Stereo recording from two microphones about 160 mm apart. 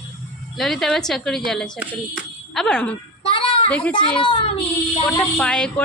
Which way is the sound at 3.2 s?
35° left (ahead or behind).